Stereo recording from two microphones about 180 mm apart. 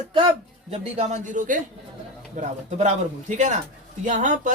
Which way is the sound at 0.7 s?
40° right (ahead or behind).